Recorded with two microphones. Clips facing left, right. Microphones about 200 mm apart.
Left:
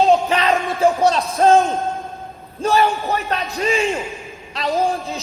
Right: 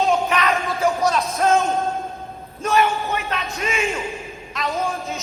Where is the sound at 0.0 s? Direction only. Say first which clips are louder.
Left 4 dB; 30° left (ahead or behind).